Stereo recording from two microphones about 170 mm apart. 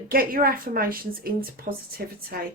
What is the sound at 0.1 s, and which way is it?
Speech, 60° right (ahead or behind).